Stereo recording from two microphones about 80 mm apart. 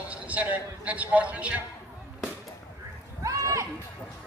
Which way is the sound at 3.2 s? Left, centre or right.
Right.